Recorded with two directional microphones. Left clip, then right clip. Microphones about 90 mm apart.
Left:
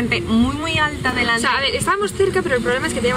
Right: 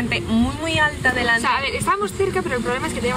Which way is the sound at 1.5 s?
5° left (ahead or behind).